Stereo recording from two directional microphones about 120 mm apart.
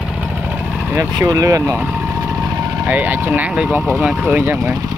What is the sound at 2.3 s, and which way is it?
Vehicle, 25° right (ahead or behind).